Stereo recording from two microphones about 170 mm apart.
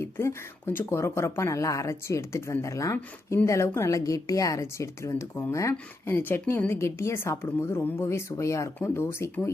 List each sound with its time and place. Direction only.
0.0 s speech: 15° left (ahead or behind)